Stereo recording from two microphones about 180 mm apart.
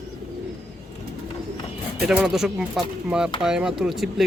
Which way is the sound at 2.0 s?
5° right (ahead or behind).